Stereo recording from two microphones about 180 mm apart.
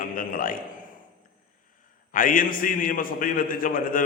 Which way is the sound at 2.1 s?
50° left (ahead or behind).